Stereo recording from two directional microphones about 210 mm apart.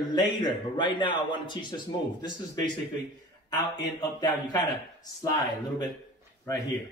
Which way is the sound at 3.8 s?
20° left (ahead or behind).